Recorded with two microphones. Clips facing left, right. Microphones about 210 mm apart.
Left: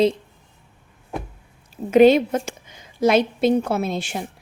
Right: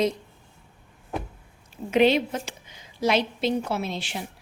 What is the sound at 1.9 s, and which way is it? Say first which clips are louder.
A woman's voice: left 7 dB; 45° left (ahead or behind).